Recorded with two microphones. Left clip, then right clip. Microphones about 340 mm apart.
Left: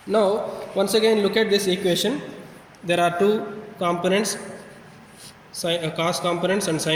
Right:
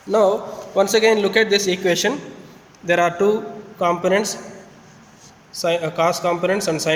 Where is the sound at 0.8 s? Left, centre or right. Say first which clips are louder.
Right 4 dB; right.